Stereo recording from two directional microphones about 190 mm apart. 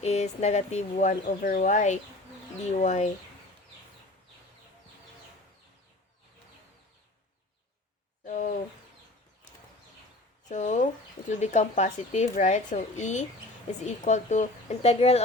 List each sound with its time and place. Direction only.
0.0 s a woman's voice: 35° left (ahead or behind)
8.2 s a sound: 40° left (ahead or behind)
10.5 s a woman's voice: 40° left (ahead or behind)